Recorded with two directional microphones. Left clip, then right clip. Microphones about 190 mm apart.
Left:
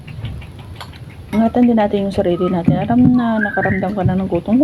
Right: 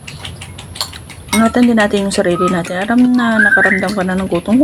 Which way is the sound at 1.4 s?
25° right (ahead or behind).